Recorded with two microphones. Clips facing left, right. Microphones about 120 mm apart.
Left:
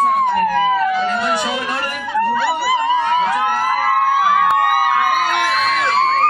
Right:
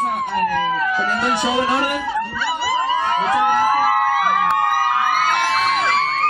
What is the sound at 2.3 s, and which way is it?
Dog, 60° left (ahead or behind).